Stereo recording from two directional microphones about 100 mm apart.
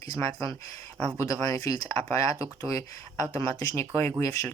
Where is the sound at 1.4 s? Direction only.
35° left (ahead or behind).